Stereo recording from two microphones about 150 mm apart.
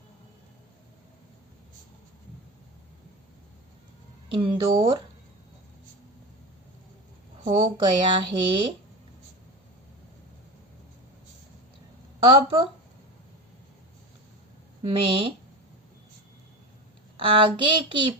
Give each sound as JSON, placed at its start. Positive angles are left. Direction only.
{"t": 4.3, "sound": "speech", "side_deg": -35}
{"t": 7.4, "sound": "speech", "side_deg": -35}
{"t": 12.2, "sound": "speech", "side_deg": -35}
{"t": 14.8, "sound": "speech", "side_deg": -35}
{"t": 17.2, "sound": "speech", "side_deg": -35}